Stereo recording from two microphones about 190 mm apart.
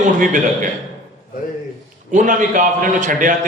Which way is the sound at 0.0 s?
40° right (ahead or behind).